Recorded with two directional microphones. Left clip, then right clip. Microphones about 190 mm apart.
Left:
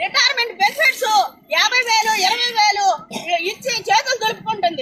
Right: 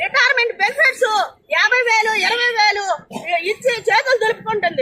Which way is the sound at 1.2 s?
5° right (ahead or behind).